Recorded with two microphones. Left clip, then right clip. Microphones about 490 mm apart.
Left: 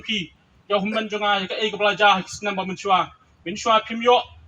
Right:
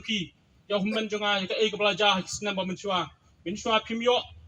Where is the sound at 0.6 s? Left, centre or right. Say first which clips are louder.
Left 6 dB; right.